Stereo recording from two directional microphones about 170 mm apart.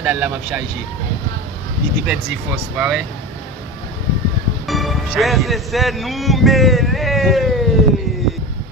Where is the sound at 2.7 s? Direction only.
5° right (ahead or behind).